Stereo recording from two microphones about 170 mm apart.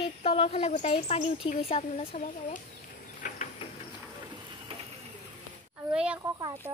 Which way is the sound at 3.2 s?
50° left (ahead or behind).